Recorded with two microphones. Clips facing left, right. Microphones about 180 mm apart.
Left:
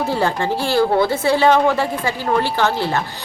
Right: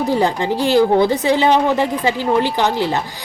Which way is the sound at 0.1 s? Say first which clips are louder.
Right 2 dB; 15° right (ahead or behind).